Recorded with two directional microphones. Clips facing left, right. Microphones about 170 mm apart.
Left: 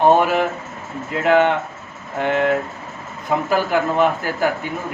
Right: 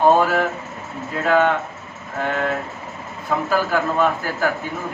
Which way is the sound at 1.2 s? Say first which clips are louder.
Left 2 dB; 20° left (ahead or behind).